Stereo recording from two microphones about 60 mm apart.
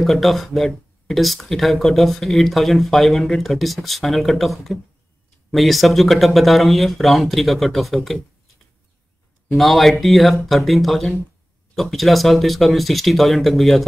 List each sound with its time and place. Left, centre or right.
0.0 s speech: centre
9.5 s speech: centre